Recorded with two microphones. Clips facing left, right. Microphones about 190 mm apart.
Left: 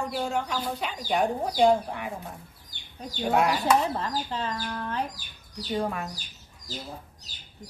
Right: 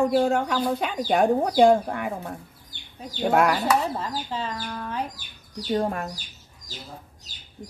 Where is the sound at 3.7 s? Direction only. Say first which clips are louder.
Even; 5° right (ahead or behind).